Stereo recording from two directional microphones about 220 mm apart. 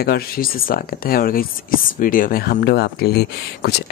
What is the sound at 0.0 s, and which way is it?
Speech, 45° left (ahead or behind).